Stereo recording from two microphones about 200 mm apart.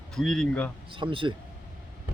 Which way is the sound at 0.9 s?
25° right (ahead or behind).